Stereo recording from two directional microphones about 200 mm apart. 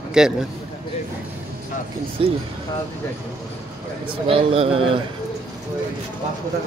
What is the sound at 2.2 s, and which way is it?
Speech, 30° right (ahead or behind).